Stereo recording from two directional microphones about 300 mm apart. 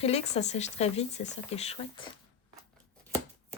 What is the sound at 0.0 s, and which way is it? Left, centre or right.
Speech, left.